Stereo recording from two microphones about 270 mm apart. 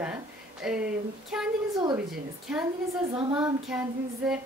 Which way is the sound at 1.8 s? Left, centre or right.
Centre.